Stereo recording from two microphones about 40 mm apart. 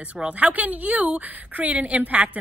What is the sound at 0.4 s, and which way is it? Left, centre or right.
A woman's voice, right.